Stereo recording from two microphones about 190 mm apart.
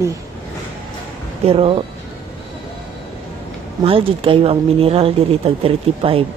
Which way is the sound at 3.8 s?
30° right (ahead or behind).